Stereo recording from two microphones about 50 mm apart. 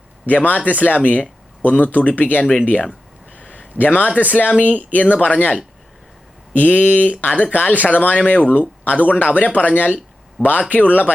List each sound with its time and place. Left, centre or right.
0.3 s speech: left
3.3 s a sound: left
3.8 s speech: left